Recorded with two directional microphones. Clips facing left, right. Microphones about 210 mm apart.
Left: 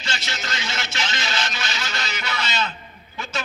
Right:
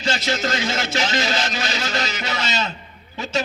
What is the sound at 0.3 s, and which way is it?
Speech, 50° right (ahead or behind).